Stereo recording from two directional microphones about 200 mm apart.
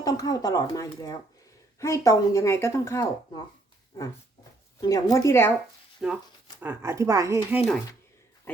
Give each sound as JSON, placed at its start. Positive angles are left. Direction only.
{"t": 0.0, "sound": "speech", "side_deg": 20}
{"t": 4.8, "sound": "speech", "side_deg": 20}
{"t": 6.0, "sound": "speech", "side_deg": 0}
{"t": 6.6, "sound": "speech", "side_deg": -10}